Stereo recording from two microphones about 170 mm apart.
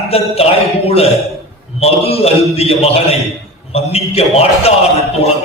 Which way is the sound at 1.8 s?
35° left (ahead or behind).